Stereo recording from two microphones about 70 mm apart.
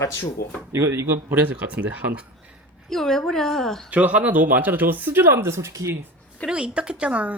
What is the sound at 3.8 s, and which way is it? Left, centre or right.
Speech, right.